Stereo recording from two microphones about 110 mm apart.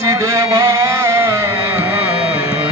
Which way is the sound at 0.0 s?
25° right (ahead or behind).